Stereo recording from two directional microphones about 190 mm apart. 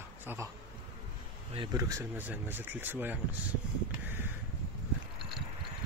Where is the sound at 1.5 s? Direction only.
25° right (ahead or behind).